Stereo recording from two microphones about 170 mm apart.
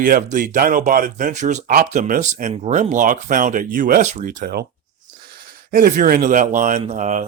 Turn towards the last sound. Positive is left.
turn(degrees=-45)  # may be behind; listen again after turning